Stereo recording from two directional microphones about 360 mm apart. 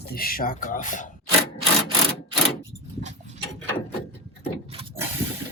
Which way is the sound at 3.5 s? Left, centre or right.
Centre.